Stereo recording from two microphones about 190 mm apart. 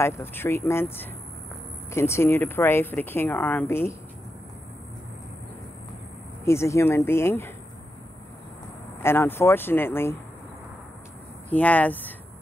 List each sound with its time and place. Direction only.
0.0 s speech: 10° left (ahead or behind)
6.4 s speech: 15° left (ahead or behind)
9.0 s speech: 10° left (ahead or behind)
11.5 s speech: 10° left (ahead or behind)